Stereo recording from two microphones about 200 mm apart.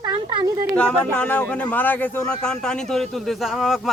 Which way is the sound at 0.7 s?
5° left (ahead or behind).